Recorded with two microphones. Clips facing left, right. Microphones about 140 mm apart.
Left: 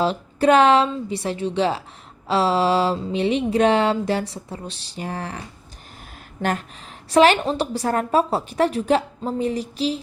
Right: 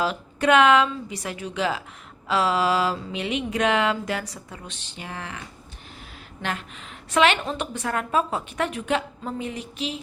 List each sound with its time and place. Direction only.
0.0 s a woman's voice: 30° left (ahead or behind)
6.4 s a woman's voice: 40° left (ahead or behind)